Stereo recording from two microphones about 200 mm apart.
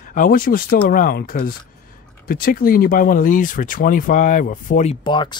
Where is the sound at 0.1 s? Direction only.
45° left (ahead or behind).